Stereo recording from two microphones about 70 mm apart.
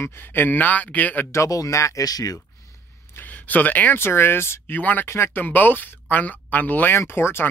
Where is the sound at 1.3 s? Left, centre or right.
Left.